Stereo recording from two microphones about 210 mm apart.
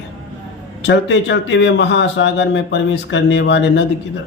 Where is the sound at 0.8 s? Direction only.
60° left (ahead or behind).